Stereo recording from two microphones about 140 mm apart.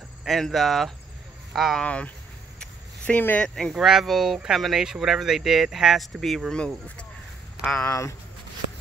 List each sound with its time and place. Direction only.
0.2 s speech: centre (ahead or behind)
7.8 s speech: 20° left (ahead or behind)